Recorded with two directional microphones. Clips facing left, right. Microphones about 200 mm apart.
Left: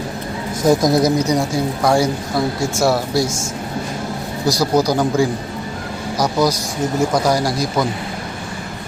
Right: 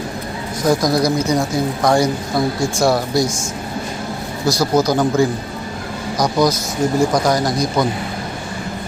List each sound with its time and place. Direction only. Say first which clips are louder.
0.6 s a woman's voice: left 2 dB; 25° left (ahead or behind); by 3.3 s 5° left (ahead or behind)
4.4 s a woman's voice: even; 15° left (ahead or behind)